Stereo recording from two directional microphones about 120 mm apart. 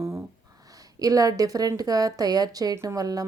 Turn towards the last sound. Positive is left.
turn(degrees=-30)  # may be behind; listen again after turning